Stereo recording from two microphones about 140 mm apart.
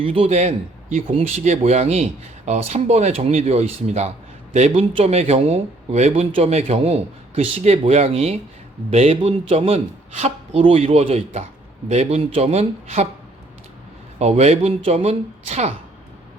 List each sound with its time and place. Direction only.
0.0 s speech: 45° right (ahead or behind)
14.2 s speech: 50° right (ahead or behind)